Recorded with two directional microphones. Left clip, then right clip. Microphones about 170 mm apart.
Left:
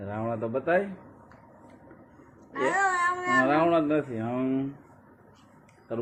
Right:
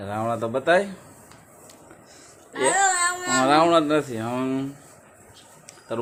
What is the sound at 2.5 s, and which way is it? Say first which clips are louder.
Speech: right 4 dB; 30° right (ahead or behind).